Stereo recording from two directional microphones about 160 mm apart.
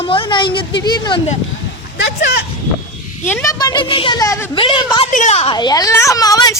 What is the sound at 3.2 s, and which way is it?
Speech, 15° left (ahead or behind).